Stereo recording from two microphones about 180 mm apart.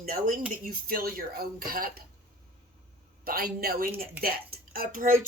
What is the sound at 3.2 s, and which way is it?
Speech, 55° right (ahead or behind).